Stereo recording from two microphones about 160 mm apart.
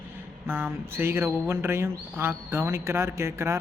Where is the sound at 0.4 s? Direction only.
10° right (ahead or behind).